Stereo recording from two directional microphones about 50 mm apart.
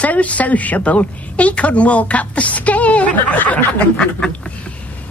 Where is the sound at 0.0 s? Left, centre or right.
Left.